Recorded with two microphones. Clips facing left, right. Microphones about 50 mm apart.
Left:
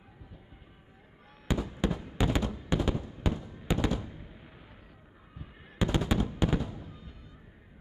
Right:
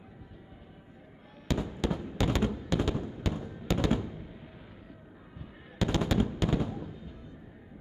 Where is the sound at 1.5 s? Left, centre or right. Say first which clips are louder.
Even; centre.